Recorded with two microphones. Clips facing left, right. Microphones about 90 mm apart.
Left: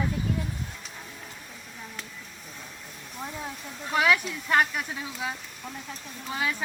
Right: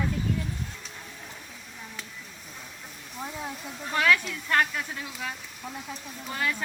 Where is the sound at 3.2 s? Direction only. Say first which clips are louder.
Right 1 dB; centre (ahead or behind).